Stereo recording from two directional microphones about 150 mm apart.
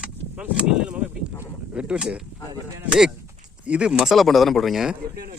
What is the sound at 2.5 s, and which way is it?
Speech, 25° right (ahead or behind).